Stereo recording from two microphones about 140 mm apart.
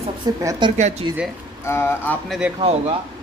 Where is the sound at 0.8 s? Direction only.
55° right (ahead or behind).